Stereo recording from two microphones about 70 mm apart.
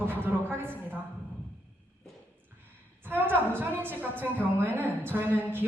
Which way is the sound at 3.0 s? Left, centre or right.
Right.